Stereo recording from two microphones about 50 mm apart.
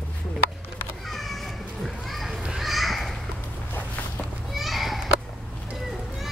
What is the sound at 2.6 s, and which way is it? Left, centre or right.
Children playing, centre.